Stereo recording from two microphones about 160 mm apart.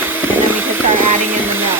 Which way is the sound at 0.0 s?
10° right (ahead or behind).